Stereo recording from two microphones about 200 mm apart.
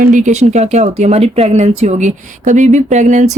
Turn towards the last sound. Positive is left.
turn(degrees=-35)  # may be behind; listen again after turning